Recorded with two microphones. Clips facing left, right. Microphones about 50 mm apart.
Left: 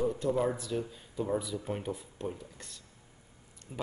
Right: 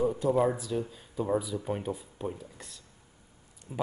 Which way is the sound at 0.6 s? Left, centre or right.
Centre.